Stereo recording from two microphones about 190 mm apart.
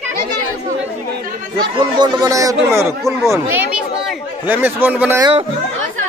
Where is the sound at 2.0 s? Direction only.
20° right (ahead or behind).